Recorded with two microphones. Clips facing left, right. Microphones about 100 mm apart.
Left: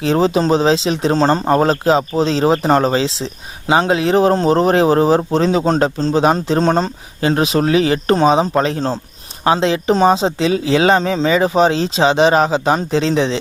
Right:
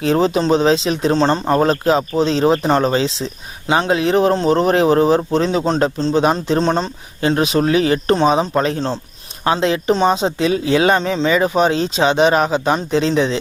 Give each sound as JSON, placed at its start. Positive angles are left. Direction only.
{"t": 0.0, "sound": "a man's voice", "side_deg": 30}
{"t": 7.2, "sound": "a man's voice", "side_deg": 30}